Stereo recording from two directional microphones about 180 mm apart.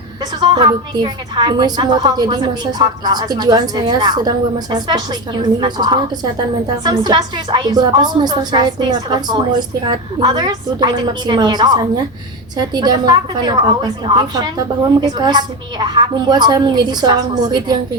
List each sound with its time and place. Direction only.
0.2 s a woman's voice: 25° right (ahead or behind)